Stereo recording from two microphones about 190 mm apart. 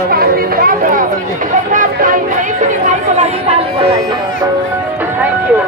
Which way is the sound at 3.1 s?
35° right (ahead or behind).